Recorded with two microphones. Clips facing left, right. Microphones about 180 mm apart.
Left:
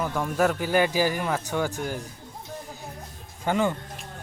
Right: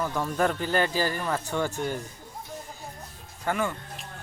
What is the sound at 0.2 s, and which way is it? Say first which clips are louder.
A man's voice: left 3 dB; 10° left (ahead or behind).